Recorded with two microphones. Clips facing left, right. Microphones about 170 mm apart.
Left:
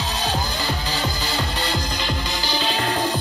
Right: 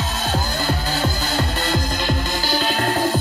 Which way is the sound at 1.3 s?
45° right (ahead or behind).